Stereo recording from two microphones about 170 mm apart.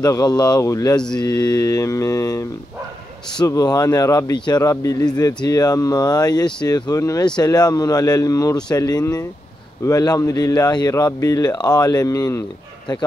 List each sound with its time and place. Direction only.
0.0 s speech: 25° left (ahead or behind)